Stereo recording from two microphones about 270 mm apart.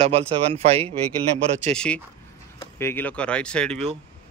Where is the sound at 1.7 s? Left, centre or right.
Centre.